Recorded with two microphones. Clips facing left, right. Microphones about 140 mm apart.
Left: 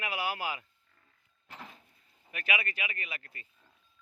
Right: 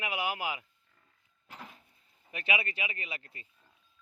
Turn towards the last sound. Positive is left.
turn(degrees=-25)  # may be behind; listen again after turning